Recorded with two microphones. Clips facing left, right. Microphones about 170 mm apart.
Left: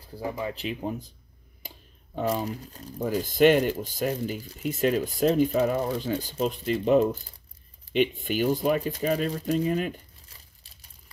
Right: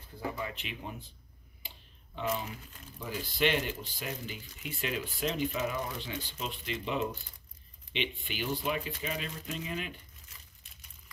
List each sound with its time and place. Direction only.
0.1 s speech: 35° left (ahead or behind)
1.6 s tick: 45° left (ahead or behind)
2.1 s speech: 40° left (ahead or behind)